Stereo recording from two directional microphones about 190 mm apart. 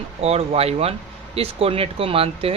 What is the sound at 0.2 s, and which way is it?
Speech, 30° right (ahead or behind).